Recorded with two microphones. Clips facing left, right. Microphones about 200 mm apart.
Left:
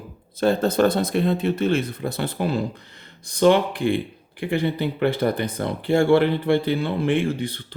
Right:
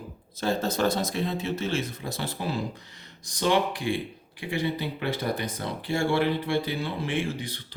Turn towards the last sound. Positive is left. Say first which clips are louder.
# left 8 dB
turn(degrees=55)  # may be behind; listen again after turning